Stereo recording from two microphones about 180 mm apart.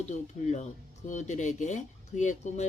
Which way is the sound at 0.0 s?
40° left (ahead or behind).